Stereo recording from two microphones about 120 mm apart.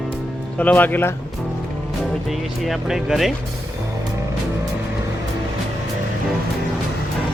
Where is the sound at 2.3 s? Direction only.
Centre (ahead or behind).